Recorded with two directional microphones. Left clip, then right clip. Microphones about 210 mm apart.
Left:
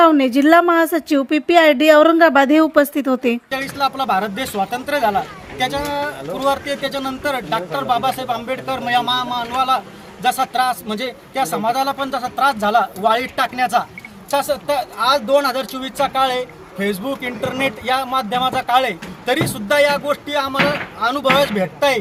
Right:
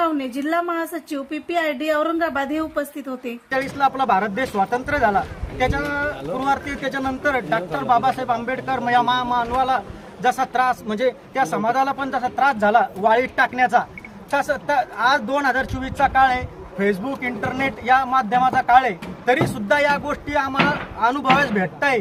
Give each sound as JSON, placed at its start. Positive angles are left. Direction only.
{"t": 0.0, "sound": "a woman's voice", "side_deg": 40}
{"t": 3.5, "sound": "speech", "side_deg": 10}